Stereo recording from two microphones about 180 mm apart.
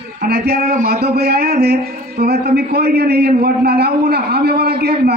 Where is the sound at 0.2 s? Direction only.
60° right (ahead or behind).